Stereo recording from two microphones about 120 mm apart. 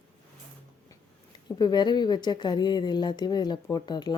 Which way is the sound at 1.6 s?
35° left (ahead or behind).